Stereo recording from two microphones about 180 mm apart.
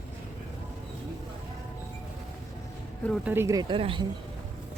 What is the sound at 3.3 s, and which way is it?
Speech, 15° right (ahead or behind).